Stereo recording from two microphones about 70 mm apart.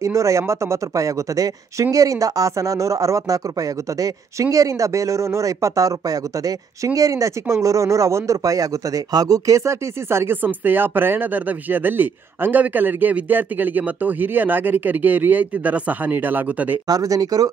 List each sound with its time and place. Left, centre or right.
0.0 s a man's voice: right
10.0 s speech: right
16.8 s speech: right